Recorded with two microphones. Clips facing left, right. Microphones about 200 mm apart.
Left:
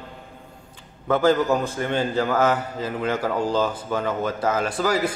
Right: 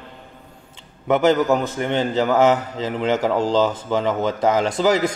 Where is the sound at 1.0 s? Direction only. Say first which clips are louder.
Right 2 dB; 20° right (ahead or behind).